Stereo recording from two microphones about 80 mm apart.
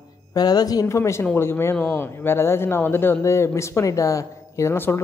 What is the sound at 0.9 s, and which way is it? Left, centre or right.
Speech, left.